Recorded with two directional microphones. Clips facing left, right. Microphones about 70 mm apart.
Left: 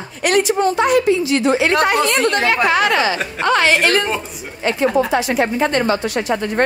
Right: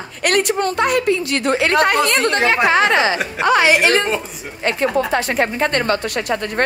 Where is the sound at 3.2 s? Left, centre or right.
Centre.